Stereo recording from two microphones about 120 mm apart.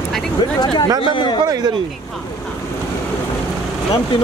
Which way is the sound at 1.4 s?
35° right (ahead or behind).